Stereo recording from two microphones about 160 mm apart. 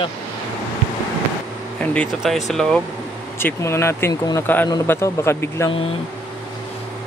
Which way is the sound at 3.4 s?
15° left (ahead or behind).